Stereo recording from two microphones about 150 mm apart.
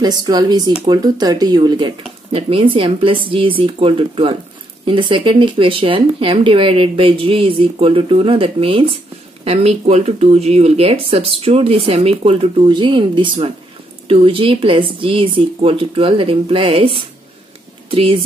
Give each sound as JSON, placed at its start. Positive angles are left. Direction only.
{"t": 0.0, "sound": "speech", "side_deg": -25}